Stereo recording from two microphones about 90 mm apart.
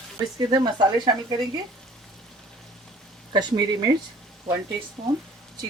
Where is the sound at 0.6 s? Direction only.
50° right (ahead or behind).